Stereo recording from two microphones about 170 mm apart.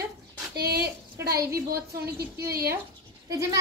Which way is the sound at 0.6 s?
65° right (ahead or behind).